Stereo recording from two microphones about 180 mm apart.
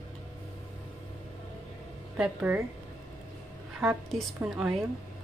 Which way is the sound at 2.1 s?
5° right (ahead or behind).